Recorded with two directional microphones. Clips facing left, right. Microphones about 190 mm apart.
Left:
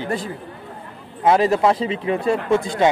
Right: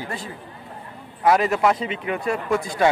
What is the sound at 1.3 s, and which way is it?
A man's voice, 30° left (ahead or behind).